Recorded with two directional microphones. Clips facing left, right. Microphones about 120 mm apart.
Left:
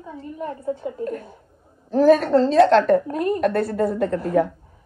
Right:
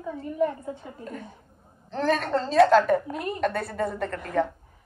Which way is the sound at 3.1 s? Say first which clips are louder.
Left 9 dB; 45° left (ahead or behind).